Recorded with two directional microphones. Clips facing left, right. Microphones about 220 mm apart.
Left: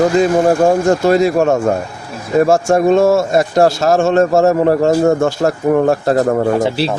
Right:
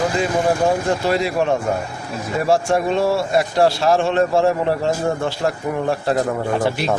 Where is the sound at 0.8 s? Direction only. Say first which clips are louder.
Left 8 dB; 45° left (ahead or behind).